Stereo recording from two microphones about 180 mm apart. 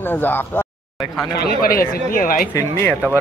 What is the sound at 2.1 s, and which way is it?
Speech, 50° left (ahead or behind).